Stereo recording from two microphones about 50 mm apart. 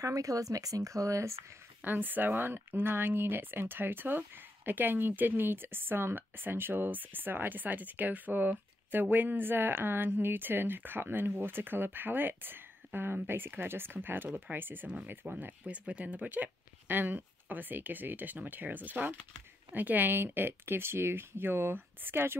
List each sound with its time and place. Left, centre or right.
0.3 s speech: right
1.8 s speech: right